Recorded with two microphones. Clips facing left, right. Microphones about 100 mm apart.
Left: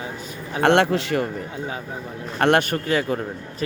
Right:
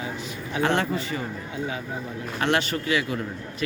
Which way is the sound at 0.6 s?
65° left (ahead or behind).